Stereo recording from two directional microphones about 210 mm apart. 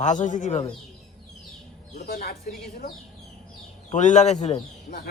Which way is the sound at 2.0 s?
45° left (ahead or behind).